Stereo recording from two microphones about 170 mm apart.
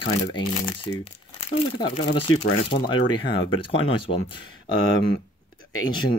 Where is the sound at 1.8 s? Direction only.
35° left (ahead or behind).